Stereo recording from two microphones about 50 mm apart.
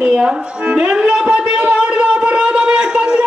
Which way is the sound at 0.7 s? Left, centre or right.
Centre.